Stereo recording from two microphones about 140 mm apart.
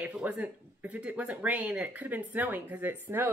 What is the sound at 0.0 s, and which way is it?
Speech, 10° right (ahead or behind).